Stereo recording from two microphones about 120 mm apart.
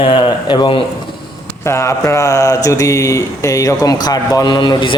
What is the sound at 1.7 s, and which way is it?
Speech, 25° left (ahead or behind).